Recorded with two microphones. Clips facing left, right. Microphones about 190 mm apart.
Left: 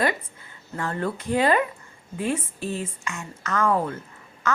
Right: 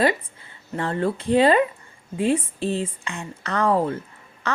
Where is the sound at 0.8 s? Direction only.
30° right (ahead or behind).